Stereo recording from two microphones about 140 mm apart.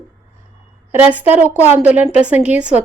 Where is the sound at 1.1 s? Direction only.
10° right (ahead or behind).